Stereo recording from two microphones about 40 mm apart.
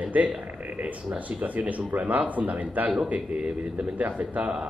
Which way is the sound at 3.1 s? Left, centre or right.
Right.